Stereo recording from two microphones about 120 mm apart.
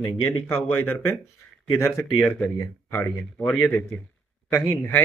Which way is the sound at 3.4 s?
5° left (ahead or behind).